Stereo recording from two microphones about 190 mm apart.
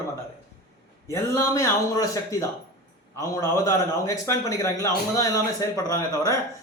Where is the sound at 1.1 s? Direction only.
15° left (ahead or behind).